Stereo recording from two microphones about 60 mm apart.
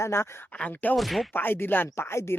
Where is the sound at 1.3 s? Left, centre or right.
Left.